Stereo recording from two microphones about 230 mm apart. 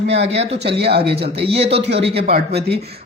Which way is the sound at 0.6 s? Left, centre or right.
Right.